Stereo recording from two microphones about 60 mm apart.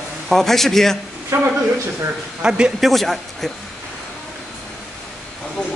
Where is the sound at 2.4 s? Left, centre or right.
Centre.